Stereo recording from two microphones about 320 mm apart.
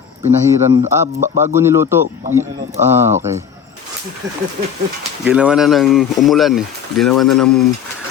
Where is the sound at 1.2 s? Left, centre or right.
Right.